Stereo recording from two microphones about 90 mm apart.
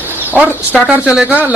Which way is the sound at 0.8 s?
10° right (ahead or behind).